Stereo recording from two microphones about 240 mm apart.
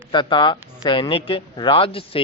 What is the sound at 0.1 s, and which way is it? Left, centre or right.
A man's voice, centre.